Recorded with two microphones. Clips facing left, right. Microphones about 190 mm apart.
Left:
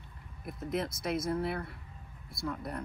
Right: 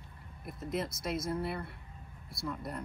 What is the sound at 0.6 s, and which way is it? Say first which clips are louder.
Speech: left 2 dB; 60° left (ahead or behind).